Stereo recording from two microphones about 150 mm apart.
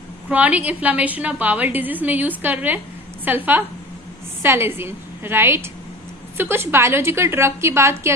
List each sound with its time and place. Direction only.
0.3 s a woman's voice: 10° right (ahead or behind)